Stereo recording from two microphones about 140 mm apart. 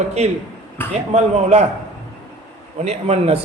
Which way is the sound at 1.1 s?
50° right (ahead or behind).